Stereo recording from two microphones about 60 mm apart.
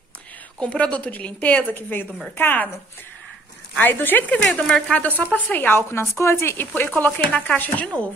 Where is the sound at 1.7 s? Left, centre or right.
Left.